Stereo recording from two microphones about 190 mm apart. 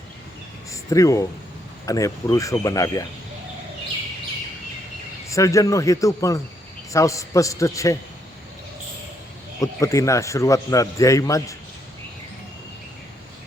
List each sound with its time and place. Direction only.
0.7 s a sound: 15° left (ahead or behind)
1.9 s a man's voice: 15° left (ahead or behind)
5.3 s a man's voice: 15° left (ahead or behind)
9.6 s a man's voice: 15° left (ahead or behind)